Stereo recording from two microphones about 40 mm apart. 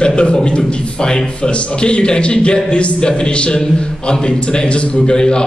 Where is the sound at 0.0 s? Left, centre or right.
Left.